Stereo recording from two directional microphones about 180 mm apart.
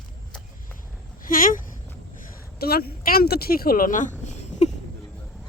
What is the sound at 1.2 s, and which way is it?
Speech, 50° left (ahead or behind).